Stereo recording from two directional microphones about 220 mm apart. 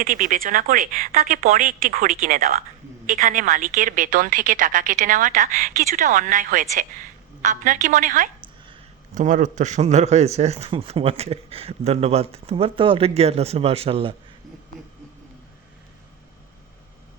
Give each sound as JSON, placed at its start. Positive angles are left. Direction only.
{"t": 0.0, "sound": "a woman's voice", "side_deg": -40}